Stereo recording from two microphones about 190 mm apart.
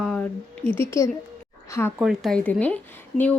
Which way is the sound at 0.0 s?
5° left (ahead or behind).